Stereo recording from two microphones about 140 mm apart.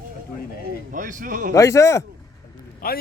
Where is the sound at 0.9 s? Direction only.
70° right (ahead or behind).